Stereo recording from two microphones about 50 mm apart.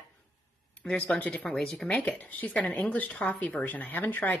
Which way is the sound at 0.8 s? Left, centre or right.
Left.